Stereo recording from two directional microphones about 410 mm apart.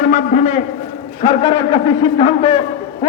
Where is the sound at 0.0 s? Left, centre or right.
Centre.